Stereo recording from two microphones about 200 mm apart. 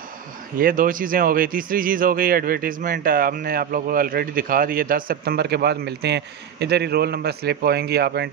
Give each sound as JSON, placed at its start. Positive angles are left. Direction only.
{"t": 0.6, "sound": "speech", "side_deg": -45}